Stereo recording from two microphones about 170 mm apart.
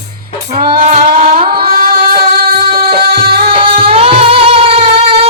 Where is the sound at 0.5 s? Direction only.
60° right (ahead or behind).